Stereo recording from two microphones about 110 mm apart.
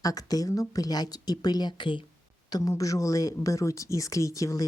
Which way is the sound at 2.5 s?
30° left (ahead or behind).